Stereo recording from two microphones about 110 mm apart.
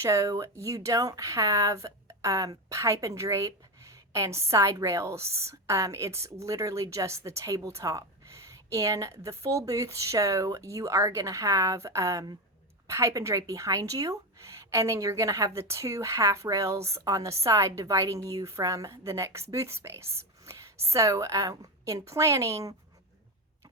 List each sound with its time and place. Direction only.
0.0 s speech: 30° right (ahead or behind)